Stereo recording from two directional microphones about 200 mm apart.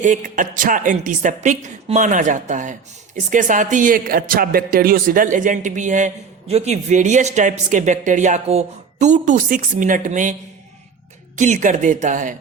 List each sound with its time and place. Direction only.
0.0 s speech: 40° right (ahead or behind)
11.3 s speech: 35° right (ahead or behind)